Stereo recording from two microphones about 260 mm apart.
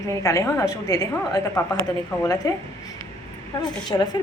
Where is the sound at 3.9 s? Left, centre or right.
Centre.